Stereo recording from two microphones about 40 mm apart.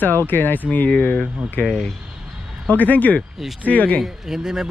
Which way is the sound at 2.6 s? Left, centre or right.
Left.